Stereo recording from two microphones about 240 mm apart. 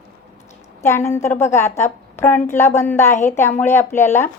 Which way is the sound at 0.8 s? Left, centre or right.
Centre.